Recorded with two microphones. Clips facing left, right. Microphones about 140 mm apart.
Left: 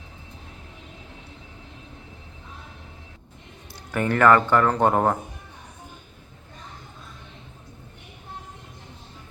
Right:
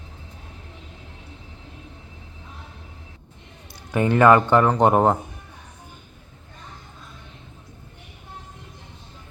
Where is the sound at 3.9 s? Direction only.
20° right (ahead or behind).